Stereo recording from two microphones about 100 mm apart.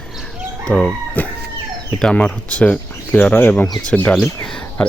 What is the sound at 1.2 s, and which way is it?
Chicken, 15° left (ahead or behind).